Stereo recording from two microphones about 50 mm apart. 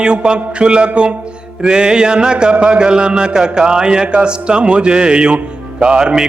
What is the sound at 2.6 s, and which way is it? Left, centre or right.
Mantra, centre.